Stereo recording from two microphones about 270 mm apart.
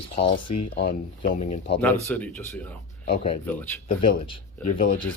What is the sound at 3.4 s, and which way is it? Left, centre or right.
Speech, centre.